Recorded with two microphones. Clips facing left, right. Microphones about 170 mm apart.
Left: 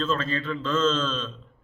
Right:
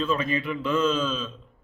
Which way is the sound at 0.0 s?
15° right (ahead or behind).